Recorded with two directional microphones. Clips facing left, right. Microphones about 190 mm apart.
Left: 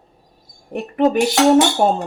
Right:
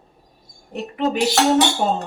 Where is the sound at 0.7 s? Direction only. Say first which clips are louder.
Left 5 dB; 50° left (ahead or behind).